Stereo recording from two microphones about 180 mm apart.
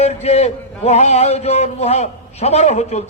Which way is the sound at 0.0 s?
35° left (ahead or behind).